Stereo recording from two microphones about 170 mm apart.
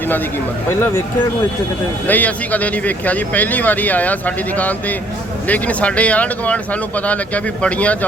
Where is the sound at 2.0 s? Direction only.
10° left (ahead or behind).